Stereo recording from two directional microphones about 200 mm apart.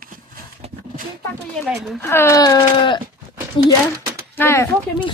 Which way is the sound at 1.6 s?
Centre (ahead or behind).